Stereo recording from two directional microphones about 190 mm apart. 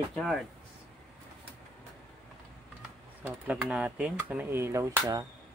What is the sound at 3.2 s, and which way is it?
Speech, 10° right (ahead or behind).